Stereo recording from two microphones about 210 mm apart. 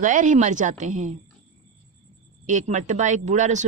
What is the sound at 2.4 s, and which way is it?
Speech, 35° right (ahead or behind).